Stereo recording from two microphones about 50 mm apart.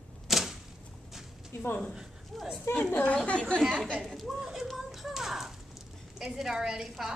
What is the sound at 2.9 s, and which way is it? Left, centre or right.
Speech, left.